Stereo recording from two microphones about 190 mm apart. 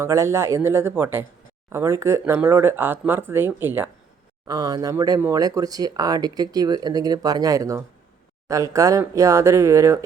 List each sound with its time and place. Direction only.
0.0 s speech: 15° right (ahead or behind)